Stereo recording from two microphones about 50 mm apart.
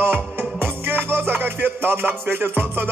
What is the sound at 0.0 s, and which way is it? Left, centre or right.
Music, right.